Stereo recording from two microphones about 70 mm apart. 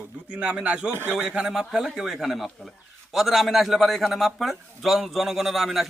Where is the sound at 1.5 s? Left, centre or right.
Centre.